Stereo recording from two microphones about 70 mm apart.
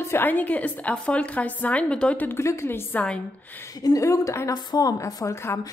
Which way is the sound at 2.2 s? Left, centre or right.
Left.